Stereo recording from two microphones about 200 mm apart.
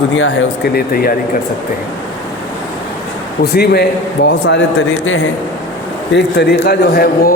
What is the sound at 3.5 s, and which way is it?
A man's voice, 50° left (ahead or behind).